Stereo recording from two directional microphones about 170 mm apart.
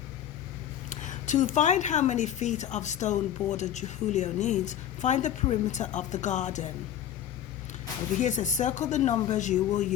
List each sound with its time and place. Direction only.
0.9 s speech: 45° left (ahead or behind)
8.2 s speech: 45° left (ahead or behind)